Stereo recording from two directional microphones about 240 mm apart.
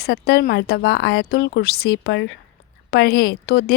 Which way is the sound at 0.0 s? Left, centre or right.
Left.